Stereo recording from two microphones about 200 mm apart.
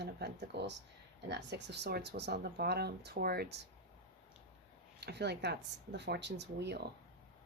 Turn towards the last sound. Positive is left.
turn(degrees=-60)  # may be behind; listen again after turning